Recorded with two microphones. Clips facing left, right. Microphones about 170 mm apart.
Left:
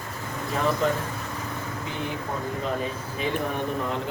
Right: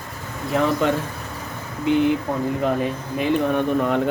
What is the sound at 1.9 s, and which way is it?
Speech, 70° right (ahead or behind).